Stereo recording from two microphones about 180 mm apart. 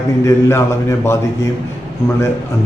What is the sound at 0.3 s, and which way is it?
Speech, 15° left (ahead or behind).